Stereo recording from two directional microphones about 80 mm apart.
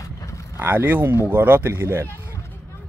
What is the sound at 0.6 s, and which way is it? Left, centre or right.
A man's voice, right.